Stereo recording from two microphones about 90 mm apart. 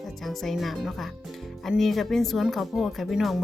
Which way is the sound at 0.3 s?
Centre (ahead or behind).